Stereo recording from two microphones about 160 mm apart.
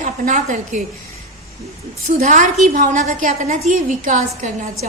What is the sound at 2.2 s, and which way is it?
A woman's voice, 50° right (ahead or behind).